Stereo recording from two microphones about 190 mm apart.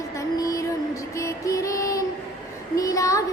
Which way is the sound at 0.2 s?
20° left (ahead or behind).